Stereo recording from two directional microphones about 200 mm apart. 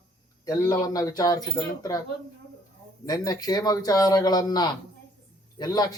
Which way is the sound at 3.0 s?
20° left (ahead or behind).